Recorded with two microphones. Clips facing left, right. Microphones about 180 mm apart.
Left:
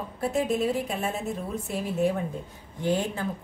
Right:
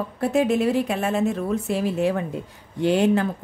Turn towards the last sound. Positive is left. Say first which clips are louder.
# right 8 dB
turn(degrees=-75)  # may be behind; listen again after turning